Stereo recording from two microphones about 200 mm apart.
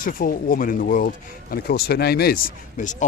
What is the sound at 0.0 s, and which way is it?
Speech, 45° left (ahead or behind).